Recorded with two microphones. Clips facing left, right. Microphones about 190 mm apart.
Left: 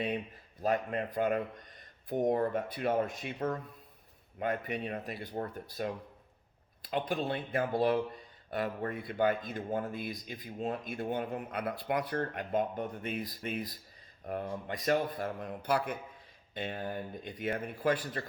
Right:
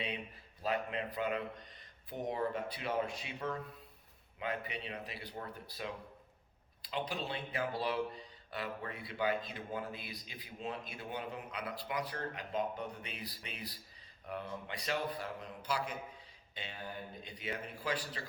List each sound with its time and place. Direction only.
0.6 s speech: 45° left (ahead or behind)